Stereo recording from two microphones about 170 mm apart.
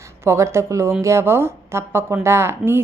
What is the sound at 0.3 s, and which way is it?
A woman's voice, 15° right (ahead or behind).